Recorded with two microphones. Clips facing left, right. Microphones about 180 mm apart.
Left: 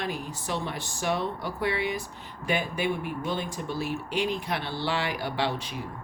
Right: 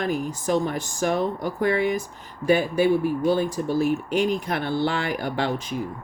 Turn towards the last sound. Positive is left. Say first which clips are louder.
# right 4 dB
turn(degrees=-45)  # may be behind; listen again after turning